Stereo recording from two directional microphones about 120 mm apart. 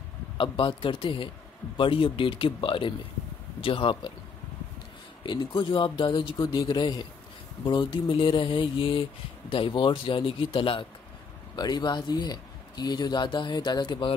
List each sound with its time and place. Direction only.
0.4 s speech: 45° left (ahead or behind)
5.2 s speech: 40° left (ahead or behind)